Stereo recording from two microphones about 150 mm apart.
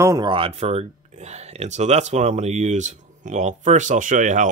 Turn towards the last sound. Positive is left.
turn(degrees=-55)  # may be behind; listen again after turning